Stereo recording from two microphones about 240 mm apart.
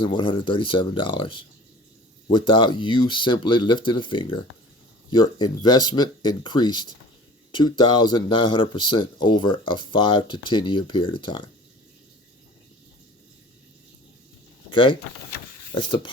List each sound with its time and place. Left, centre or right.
0.0 s speech: centre
14.7 s speech: centre